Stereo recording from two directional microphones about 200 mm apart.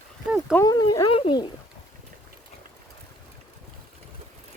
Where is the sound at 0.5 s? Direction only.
15° left (ahead or behind).